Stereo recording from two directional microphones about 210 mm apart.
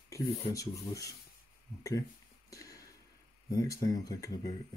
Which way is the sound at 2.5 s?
15° left (ahead or behind).